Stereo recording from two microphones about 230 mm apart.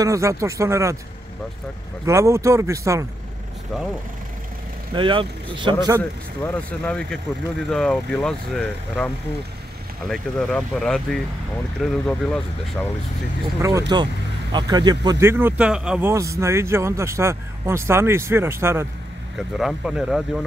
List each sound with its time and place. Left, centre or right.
0.0 s speech: centre
2.0 s speech: centre
4.9 s speech: right
6.4 s speech: centre
13.6 s speech: centre